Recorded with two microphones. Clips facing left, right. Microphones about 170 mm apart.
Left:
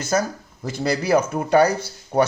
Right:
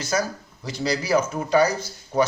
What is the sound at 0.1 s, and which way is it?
Speech, 45° left (ahead or behind).